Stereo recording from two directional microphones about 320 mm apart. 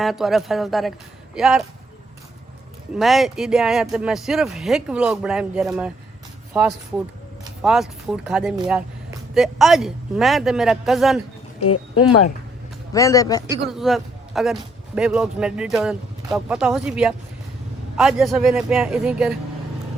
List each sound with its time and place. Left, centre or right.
0.0 s a man's voice: centre
2.9 s a man's voice: centre
11.6 s speech: left
12.9 s a man's voice: centre
13.5 s a man's voice: centre